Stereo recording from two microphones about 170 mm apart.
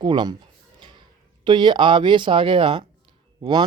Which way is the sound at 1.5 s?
25° right (ahead or behind).